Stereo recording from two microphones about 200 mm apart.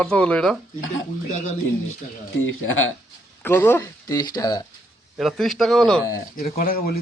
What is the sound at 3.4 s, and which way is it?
Speech, 10° left (ahead or behind).